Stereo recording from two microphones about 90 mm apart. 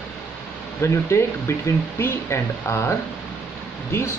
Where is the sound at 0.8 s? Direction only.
30° left (ahead or behind).